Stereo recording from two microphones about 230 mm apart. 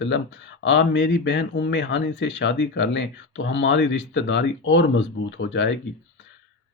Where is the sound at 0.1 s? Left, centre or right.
Left.